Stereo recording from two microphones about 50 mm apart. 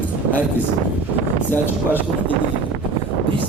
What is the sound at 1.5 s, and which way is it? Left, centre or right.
Speech, left.